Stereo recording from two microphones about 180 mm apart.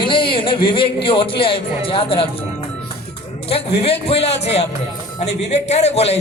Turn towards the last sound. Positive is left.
turn(degrees=35)  # may be behind; listen again after turning